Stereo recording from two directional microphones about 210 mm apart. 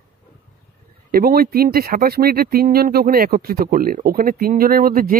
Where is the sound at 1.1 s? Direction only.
45° right (ahead or behind).